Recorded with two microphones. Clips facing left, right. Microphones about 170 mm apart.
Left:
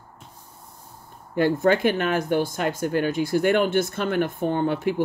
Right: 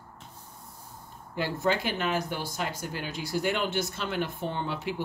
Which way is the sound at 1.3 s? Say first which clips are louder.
Left 8 dB; 55° left (ahead or behind).